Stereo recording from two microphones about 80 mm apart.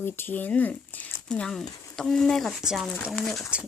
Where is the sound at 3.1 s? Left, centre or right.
Centre.